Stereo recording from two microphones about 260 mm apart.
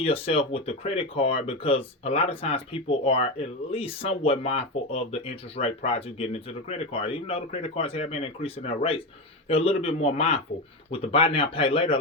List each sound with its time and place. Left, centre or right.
0.0 s speech: left